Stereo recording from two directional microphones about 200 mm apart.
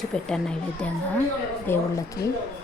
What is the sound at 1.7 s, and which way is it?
Speech, 15° left (ahead or behind).